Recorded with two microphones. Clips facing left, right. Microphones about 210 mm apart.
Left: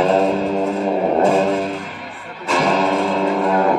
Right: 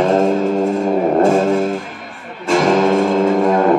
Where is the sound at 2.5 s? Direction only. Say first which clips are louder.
Right 5 dB; 45° right (ahead or behind).